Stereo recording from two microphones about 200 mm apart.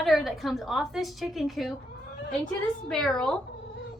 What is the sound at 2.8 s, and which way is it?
Speech, 5° left (ahead or behind).